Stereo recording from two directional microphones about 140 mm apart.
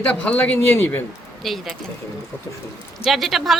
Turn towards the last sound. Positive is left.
turn(degrees=0)  # may be behind; listen again after turning